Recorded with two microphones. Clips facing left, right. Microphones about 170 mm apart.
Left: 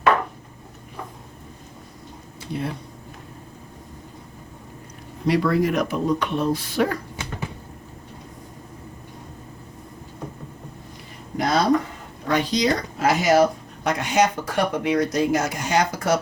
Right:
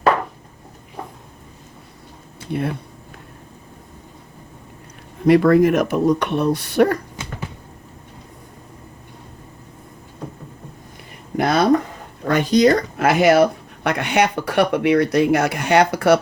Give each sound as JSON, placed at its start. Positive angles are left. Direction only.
{"t": 2.5, "sound": "speech", "side_deg": -60}
{"t": 5.2, "sound": "speech", "side_deg": -50}
{"t": 11.3, "sound": "a sound", "side_deg": -60}
{"t": 12.3, "sound": "speech", "side_deg": -50}